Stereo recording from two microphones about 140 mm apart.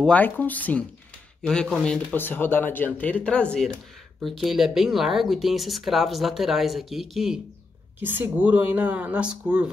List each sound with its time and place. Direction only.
0.1 s speech: 10° left (ahead or behind)
2.1 s speech: 15° left (ahead or behind); by 7.3 s centre (ahead or behind)
8.0 s speech: 15° right (ahead or behind)